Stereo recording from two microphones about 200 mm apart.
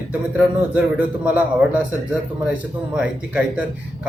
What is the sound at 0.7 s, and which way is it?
A man's voice, 5° right (ahead or behind).